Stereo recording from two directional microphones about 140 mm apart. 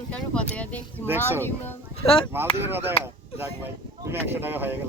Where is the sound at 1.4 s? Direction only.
15° left (ahead or behind).